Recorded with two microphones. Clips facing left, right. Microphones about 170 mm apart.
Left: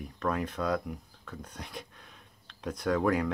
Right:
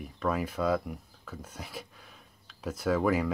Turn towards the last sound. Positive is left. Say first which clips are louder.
# right 1 dB
turn(degrees=-5)  # may be behind; listen again after turning